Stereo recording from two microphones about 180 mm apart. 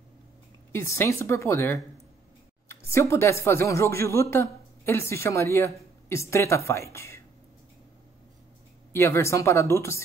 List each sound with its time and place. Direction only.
0.7 s speech: 15° left (ahead or behind)
8.9 s speech: 15° left (ahead or behind)